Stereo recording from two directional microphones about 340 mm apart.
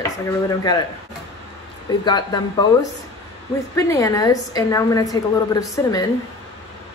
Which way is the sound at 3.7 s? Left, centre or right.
Centre.